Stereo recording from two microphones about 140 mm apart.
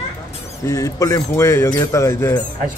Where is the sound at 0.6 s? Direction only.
20° left (ahead or behind).